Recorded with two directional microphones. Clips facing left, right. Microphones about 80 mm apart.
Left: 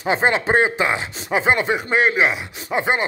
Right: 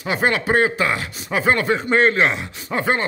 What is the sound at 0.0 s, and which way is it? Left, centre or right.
Speech, left.